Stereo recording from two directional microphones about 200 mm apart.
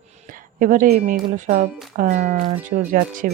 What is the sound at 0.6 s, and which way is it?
Speech, 40° right (ahead or behind).